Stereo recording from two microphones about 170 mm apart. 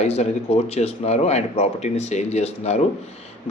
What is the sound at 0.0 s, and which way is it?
A man's voice, 40° left (ahead or behind).